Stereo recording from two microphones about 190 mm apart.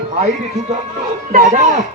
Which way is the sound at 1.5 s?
40° right (ahead or behind).